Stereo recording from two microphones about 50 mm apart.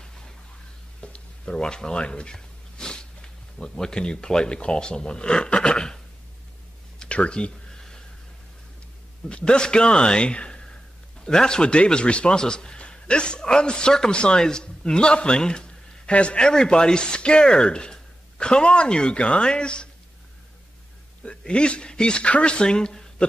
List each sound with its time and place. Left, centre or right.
1.0 s speech: centre
7.0 s a sound: left
9.3 s a man's voice: centre
21.2 s speech: left